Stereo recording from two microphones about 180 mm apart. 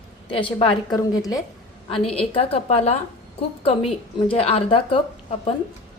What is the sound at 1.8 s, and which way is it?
A woman's voice, 30° left (ahead or behind).